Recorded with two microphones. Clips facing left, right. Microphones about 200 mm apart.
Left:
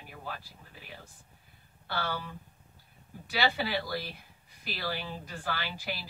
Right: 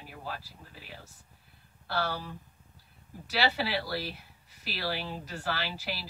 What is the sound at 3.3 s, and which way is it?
Speech, 5° right (ahead or behind).